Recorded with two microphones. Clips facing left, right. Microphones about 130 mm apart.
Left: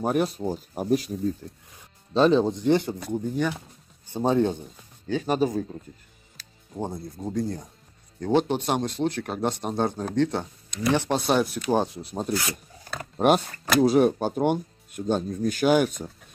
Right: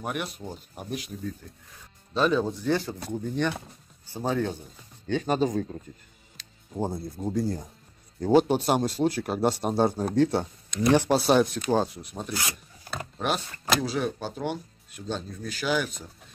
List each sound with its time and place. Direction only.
0.0 s speech: 35° left (ahead or behind); by 3.5 s 10° left (ahead or behind)
4.1 s speech: 20° left (ahead or behind)
5.0 s speech: 5° left (ahead or behind)
11.7 s speech: 20° left (ahead or behind)
12.0 s speech: 30° left (ahead or behind)
13.8 s speech: 50° left (ahead or behind)